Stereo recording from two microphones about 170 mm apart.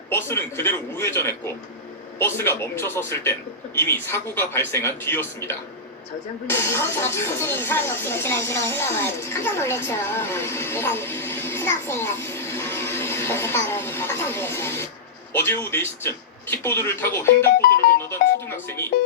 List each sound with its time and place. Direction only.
0.1 s speech: 15° left (ahead or behind)
17.6 s music: 60° left (ahead or behind)
18.1 s speech: 15° left (ahead or behind)